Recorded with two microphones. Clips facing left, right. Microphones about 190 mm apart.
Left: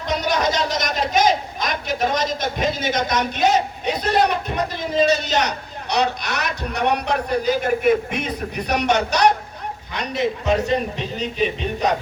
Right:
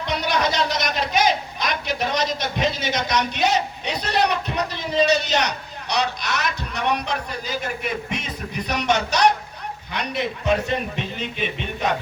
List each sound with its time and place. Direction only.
0.0 s a man's voice: 45° left (ahead or behind)
9.9 s a man's voice: 40° left (ahead or behind)